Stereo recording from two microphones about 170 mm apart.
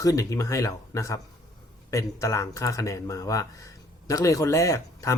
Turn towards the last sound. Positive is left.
turn(degrees=20)  # may be behind; listen again after turning